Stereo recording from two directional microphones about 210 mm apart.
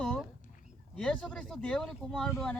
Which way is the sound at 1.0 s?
5° left (ahead or behind).